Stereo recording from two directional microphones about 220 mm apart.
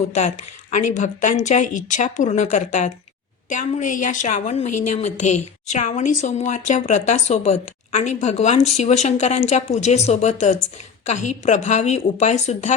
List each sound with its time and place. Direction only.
0.1 s a woman's voice: 30° left (ahead or behind)